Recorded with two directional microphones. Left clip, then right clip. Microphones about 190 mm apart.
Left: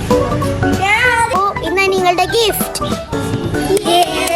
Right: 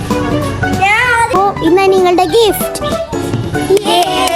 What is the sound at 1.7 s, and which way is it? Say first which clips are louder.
Music: right 4 dB; 60° right (ahead or behind).